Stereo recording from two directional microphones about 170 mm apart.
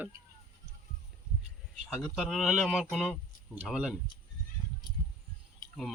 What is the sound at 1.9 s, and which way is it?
Speech, 5° right (ahead or behind).